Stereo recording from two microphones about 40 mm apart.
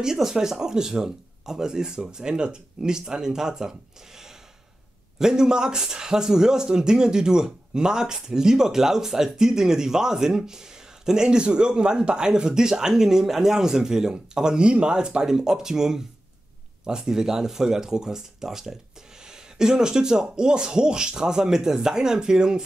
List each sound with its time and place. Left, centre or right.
0.0 s a man's voice: centre
5.2 s a man's voice: centre